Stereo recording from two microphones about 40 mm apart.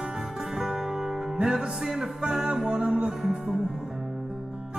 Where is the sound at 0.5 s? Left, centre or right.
Centre.